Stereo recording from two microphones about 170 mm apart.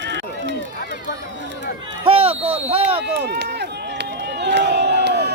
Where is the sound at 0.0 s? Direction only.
90° right.